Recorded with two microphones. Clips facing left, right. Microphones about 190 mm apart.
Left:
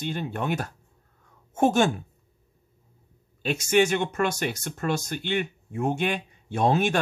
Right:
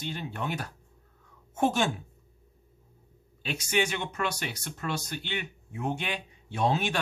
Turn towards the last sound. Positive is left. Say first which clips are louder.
# left 5 dB
turn(degrees=50)  # may be behind; listen again after turning